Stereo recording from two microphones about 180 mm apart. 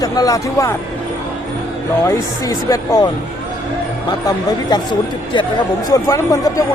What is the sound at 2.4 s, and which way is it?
Speech, 20° left (ahead or behind).